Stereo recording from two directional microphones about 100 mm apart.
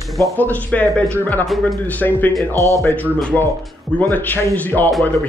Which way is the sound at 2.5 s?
35° right (ahead or behind).